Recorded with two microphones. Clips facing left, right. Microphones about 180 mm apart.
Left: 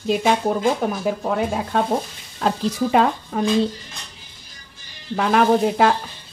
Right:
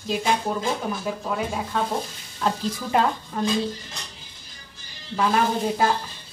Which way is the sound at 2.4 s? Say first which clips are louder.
Left 5 dB; 75° left (ahead or behind).